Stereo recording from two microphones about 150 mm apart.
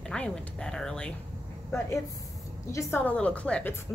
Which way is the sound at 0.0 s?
5° left (ahead or behind).